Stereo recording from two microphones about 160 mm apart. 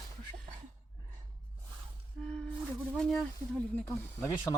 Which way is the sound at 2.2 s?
5° left (ahead or behind).